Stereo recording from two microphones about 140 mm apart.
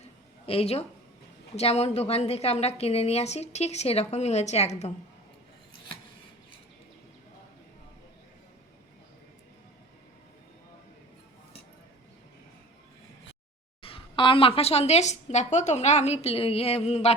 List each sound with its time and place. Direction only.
0.4 s a woman's voice: 45° left (ahead or behind)
13.8 s a woman's voice: 40° left (ahead or behind)